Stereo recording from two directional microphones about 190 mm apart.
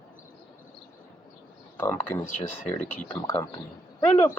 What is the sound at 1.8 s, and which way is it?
Speech, 10° left (ahead or behind).